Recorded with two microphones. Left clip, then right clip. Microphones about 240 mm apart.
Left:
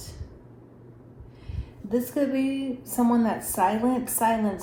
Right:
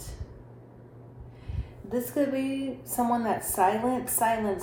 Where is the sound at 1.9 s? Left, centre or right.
Left.